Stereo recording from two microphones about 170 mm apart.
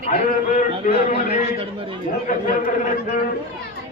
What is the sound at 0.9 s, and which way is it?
Speech, 50° left (ahead or behind).